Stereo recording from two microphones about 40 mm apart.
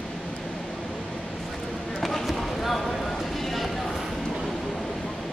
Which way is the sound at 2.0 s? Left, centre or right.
Centre.